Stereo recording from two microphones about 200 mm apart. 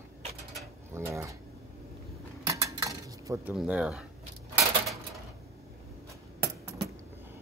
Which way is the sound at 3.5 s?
5° right (ahead or behind).